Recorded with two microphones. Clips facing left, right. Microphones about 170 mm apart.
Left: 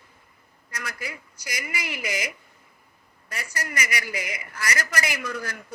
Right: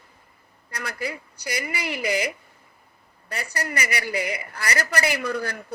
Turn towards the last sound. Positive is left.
turn(degrees=-35)  # may be behind; listen again after turning